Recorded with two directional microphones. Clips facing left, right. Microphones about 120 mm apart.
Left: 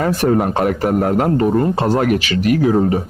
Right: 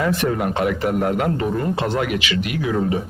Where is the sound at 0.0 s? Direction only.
40° left (ahead or behind).